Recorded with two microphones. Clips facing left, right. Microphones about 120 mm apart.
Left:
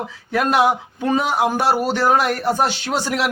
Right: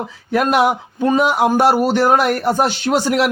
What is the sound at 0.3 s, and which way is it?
Speech, 55° right (ahead or behind).